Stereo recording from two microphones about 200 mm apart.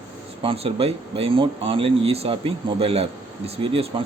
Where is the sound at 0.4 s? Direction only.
30° right (ahead or behind).